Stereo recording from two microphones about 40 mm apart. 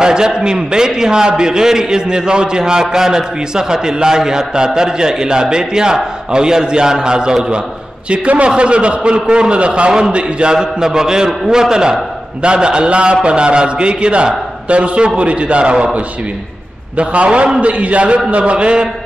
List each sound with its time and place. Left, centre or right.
0.0 s a man's voice: centre